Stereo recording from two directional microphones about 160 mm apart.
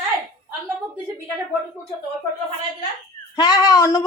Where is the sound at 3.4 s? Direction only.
25° left (ahead or behind).